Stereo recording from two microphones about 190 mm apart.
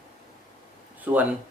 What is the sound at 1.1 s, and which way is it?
Speech, 10° right (ahead or behind).